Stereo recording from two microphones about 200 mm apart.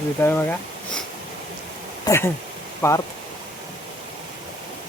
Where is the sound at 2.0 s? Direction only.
15° left (ahead or behind).